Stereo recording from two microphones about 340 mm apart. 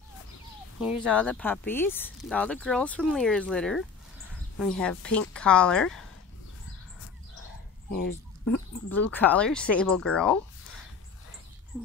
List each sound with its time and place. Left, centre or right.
0.7 s speech: centre
8.5 s speech: left
8.9 s speech: centre